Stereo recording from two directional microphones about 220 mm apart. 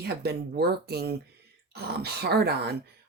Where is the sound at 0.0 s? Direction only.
45° right (ahead or behind).